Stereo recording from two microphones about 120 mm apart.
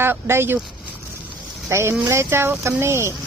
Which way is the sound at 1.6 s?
20° right (ahead or behind).